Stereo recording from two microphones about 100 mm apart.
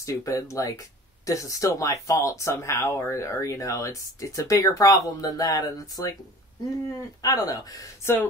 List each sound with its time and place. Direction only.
0.0 s speech: 35° left (ahead or behind)
7.2 s speech: 40° left (ahead or behind)
8.0 s speech: 25° left (ahead or behind)